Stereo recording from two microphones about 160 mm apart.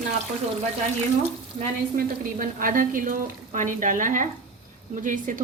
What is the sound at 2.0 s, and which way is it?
A woman's voice, 60° right (ahead or behind).